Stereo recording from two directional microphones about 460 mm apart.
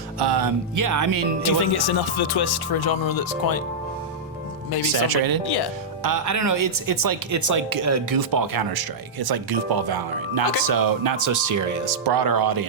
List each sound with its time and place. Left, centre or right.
0.2 s speech: right
1.7 s speech: left
4.8 s speech: right
12.0 s speech: right